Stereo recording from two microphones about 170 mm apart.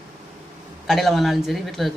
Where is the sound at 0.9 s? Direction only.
Centre (ahead or behind).